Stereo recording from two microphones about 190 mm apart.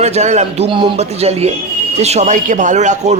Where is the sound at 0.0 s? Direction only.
35° right (ahead or behind).